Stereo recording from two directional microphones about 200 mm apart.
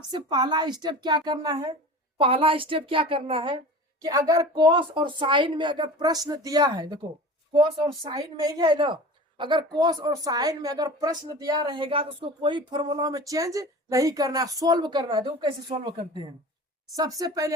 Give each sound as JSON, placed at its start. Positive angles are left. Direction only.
{"t": 0.1, "sound": "a woman's voice", "side_deg": -20}